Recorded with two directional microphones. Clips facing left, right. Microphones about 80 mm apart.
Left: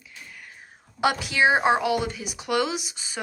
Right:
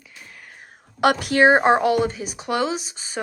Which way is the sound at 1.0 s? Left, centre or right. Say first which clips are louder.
Right 5 dB; right.